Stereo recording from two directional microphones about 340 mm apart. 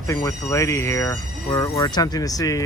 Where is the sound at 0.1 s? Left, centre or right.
Centre.